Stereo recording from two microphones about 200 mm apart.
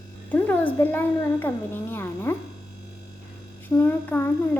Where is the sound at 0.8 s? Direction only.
10° left (ahead or behind).